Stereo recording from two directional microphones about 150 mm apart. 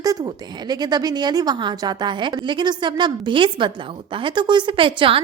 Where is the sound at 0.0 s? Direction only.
25° right (ahead or behind).